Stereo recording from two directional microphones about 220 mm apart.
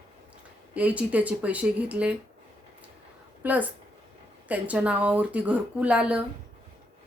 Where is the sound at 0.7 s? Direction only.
5° right (ahead or behind).